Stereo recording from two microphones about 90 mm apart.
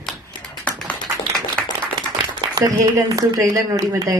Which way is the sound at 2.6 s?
35° right (ahead or behind).